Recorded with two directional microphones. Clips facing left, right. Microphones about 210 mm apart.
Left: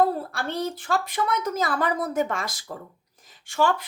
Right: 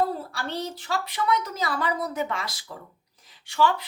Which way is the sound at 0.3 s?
50° left (ahead or behind).